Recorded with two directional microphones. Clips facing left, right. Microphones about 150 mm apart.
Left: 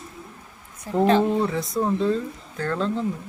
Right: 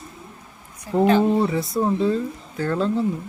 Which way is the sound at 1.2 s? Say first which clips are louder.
Right 3 dB; 10° right (ahead or behind).